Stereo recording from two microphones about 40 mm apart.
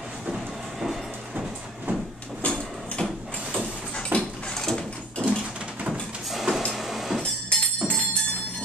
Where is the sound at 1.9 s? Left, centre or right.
Right.